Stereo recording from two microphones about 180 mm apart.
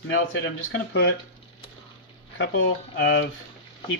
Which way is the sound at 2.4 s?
80° left.